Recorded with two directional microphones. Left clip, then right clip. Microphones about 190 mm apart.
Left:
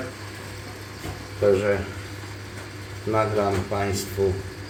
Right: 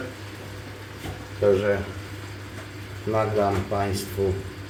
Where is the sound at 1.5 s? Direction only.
Centre (ahead or behind).